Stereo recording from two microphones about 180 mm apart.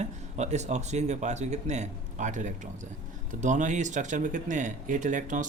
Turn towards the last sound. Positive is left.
turn(degrees=-45)  # may be behind; listen again after turning